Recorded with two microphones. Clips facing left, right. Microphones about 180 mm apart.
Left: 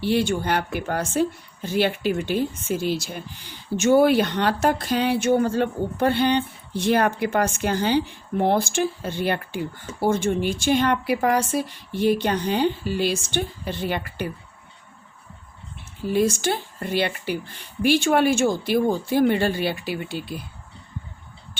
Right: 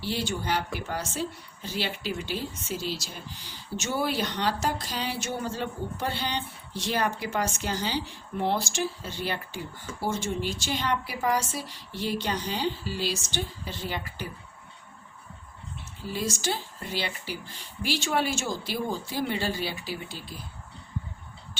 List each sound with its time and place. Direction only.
0.0 s speech: 60° left (ahead or behind)
16.0 s speech: 55° left (ahead or behind)